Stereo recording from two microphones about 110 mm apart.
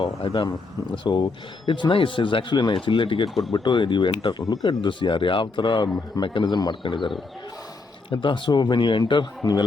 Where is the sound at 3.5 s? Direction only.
45° left (ahead or behind).